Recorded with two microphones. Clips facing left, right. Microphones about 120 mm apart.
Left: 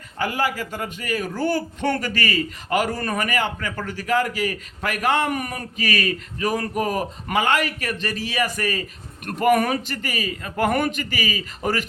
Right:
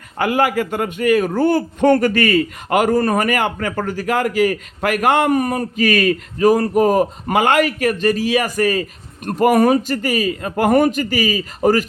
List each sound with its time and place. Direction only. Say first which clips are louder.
0.2 s a man's voice: right 7 dB; 60° right (ahead or behind)
5.3 s a man's voice: right 10 dB; 35° right (ahead or behind)